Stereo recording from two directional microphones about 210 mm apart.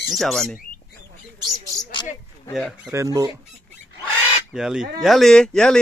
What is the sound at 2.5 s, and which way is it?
Speech, centre (ahead or behind).